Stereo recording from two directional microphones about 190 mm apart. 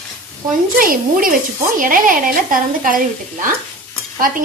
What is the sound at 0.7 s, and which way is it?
A woman's voice, 45° right (ahead or behind).